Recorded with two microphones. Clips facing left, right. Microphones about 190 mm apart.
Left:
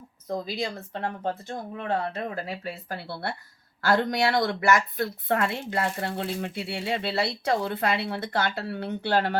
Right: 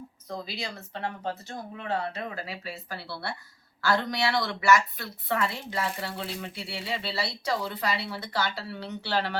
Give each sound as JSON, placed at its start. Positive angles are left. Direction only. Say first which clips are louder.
{"t": 0.3, "sound": "speech", "louder": "left 6 dB", "side_deg": 50}